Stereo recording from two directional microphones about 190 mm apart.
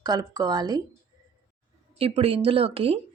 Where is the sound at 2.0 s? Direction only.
30° right (ahead or behind).